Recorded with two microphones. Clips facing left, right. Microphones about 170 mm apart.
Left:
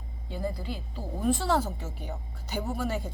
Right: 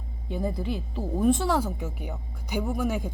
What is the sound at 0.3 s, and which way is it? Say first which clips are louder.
Speech: right 4 dB; 20° right (ahead or behind).